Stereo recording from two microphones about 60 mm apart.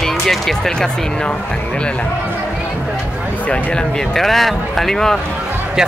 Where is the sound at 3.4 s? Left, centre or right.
Centre.